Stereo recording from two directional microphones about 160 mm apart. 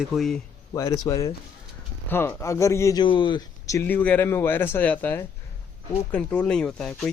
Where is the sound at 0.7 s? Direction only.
20° left (ahead or behind).